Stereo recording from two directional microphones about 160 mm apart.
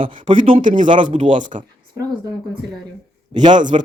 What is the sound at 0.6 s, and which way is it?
Speech, 55° right (ahead or behind).